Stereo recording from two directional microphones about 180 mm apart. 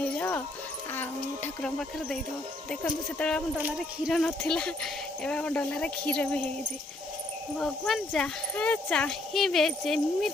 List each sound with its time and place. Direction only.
0.2 s music: 10° left (ahead or behind)
2.6 s speech: 5° left (ahead or behind)
3.6 s speech: 5° right (ahead or behind)
7.6 s speech: centre (ahead or behind)